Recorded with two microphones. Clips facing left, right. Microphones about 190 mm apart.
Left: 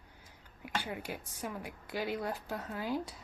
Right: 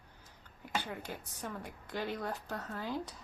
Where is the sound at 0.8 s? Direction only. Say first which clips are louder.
Left 2 dB; 10° left (ahead or behind).